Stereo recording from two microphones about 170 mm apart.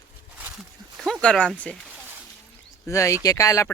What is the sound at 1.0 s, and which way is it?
Speech, 5° left (ahead or behind).